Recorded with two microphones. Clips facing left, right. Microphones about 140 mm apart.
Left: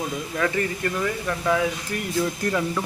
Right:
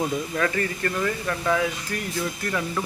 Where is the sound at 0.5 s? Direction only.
10° left (ahead or behind).